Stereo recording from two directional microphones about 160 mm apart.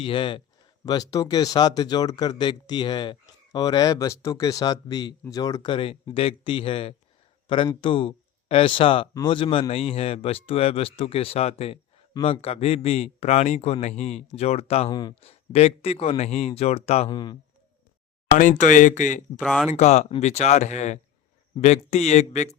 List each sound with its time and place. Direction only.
0.0 s speech: 35° left (ahead or behind)
7.4 s a sound: 30° left (ahead or behind)
7.7 s speech: 30° left (ahead or behind)
14.8 s speech: 25° left (ahead or behind)
15.1 s speech: 40° left (ahead or behind)
17.1 s speech: 25° left (ahead or behind)
18.3 s speech: 50° left (ahead or behind)
19.4 s speech: 5° left (ahead or behind)
19.7 s speech: 45° left (ahead or behind)